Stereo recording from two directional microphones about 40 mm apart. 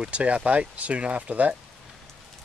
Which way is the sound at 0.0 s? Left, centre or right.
Right.